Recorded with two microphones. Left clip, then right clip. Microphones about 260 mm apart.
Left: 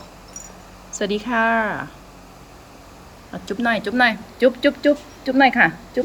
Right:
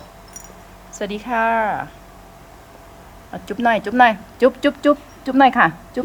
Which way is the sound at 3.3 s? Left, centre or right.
Centre.